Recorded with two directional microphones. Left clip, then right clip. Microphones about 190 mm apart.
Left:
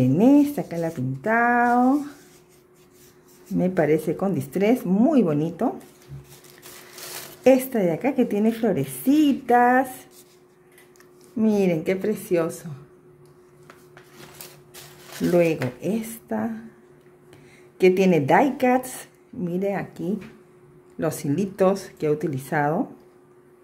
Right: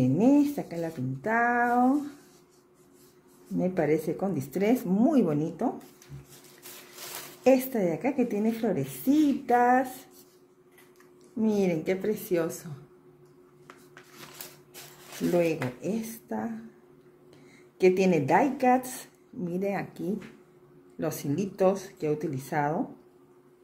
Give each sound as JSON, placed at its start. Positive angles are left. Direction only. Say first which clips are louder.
{"t": 0.0, "sound": "speech", "louder": "left 5 dB", "side_deg": 15}
{"t": 3.5, "sound": "speech", "louder": "left 6 dB", "side_deg": 15}
{"t": 7.4, "sound": "speech", "louder": "left 5 dB", "side_deg": 15}
{"t": 11.3, "sound": "speech", "louder": "left 5 dB", "side_deg": 15}
{"t": 15.2, "sound": "speech", "louder": "left 6 dB", "side_deg": 15}
{"t": 17.7, "sound": "speech", "louder": "left 5 dB", "side_deg": 15}
{"t": 21.0, "sound": "speech", "louder": "left 6 dB", "side_deg": 15}